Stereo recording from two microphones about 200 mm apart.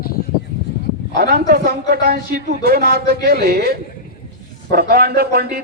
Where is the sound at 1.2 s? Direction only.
50° right (ahead or behind).